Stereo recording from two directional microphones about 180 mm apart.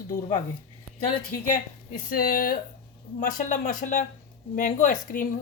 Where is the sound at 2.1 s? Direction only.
50° left (ahead or behind).